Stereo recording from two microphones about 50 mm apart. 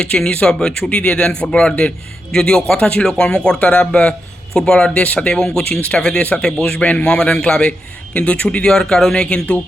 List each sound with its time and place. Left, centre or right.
0.3 s speech: centre
0.9 s a man's voice: left
4.9 s a man's voice: left
5.3 s a man's voice: centre